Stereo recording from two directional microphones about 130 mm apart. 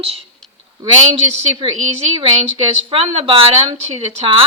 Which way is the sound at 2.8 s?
45° right (ahead or behind).